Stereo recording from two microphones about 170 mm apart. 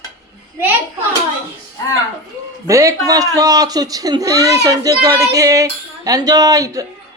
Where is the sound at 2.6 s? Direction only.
20° right (ahead or behind).